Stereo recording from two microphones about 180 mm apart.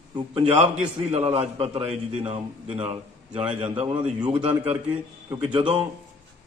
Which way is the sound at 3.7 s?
30° right (ahead or behind).